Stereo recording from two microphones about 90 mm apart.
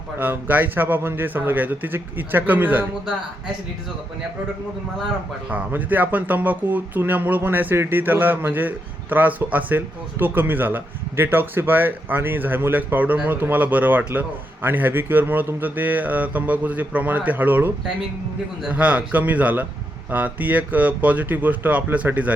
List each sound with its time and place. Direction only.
0.2 s speech: 20° right (ahead or behind)
5.5 s speech: 20° right (ahead or behind)
18.7 s speech: 15° right (ahead or behind)